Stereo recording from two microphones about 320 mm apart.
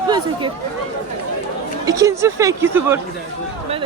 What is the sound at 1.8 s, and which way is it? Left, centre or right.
Speech, centre.